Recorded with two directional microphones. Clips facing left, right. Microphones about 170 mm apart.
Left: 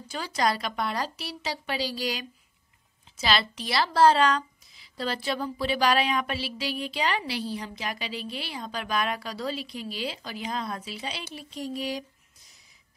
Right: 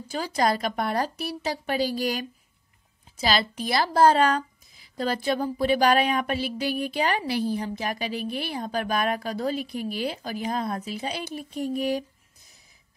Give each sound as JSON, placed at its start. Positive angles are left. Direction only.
{"t": 0.5, "sound": "a woman's voice", "side_deg": -50}
{"t": 3.2, "sound": "a woman's voice", "side_deg": -40}